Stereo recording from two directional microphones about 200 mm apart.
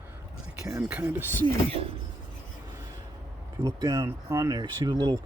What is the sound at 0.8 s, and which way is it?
Speech, 10° right (ahead or behind).